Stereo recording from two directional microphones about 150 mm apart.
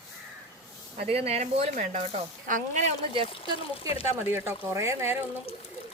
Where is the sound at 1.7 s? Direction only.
55° right (ahead or behind).